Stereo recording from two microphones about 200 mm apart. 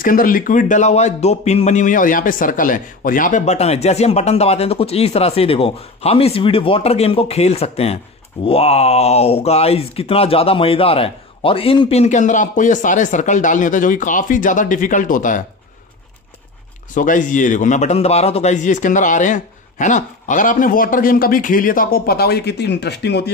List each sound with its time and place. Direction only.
0.0 s speech: 45° left (ahead or behind)
16.9 s speech: 40° left (ahead or behind); by 23.3 s 55° left (ahead or behind)